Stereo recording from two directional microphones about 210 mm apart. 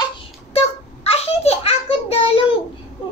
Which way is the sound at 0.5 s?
30° left (ahead or behind).